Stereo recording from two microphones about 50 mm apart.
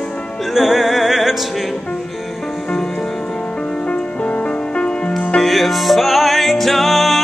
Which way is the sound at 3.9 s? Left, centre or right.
Left.